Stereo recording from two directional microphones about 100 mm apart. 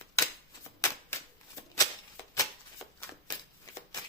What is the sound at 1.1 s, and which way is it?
Shuffling cards, 25° left (ahead or behind).